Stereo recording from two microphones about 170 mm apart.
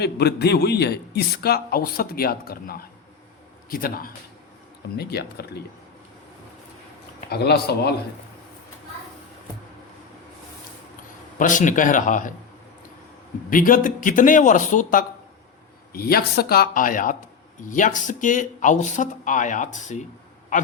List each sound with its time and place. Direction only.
0.0 s a man's voice: 75° left (ahead or behind); by 4.1 s 60° left (ahead or behind)
4.9 s speech: 70° left (ahead or behind)
7.3 s speech: 70° left (ahead or behind)
11.3 s speech: 50° left (ahead or behind)
13.5 s speech: 55° left (ahead or behind)
15.9 s a man's voice: 60° left (ahead or behind)